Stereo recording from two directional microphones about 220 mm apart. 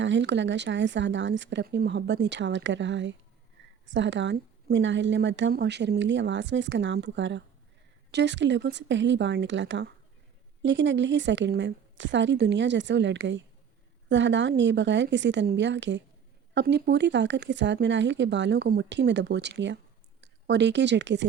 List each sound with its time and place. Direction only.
0.0 s a woman's voice: 55° right (ahead or behind)